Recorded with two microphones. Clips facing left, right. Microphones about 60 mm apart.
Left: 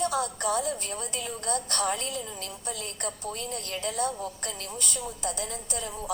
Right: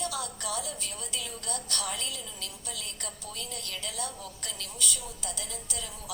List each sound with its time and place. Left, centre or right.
0.0 s a woman's voice: left